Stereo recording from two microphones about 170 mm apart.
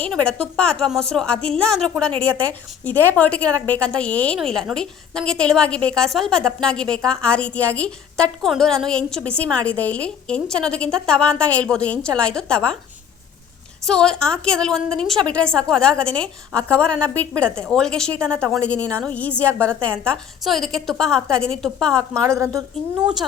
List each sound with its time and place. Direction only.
0.0 s a woman's voice: 5° left (ahead or behind)
13.8 s a woman's voice: 5° left (ahead or behind)
22.1 s a woman's voice: 15° right (ahead or behind)